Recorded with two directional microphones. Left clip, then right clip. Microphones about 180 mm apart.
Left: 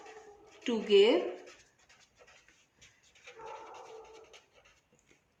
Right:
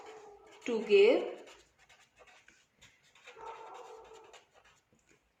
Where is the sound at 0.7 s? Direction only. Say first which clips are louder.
Even; 25° left (ahead or behind).